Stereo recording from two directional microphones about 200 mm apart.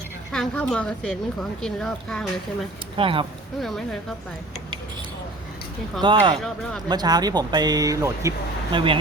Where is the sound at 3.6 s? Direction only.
Centre (ahead or behind).